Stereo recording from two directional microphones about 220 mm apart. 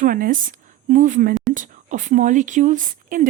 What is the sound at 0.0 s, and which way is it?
A woman's voice, 40° right (ahead or behind).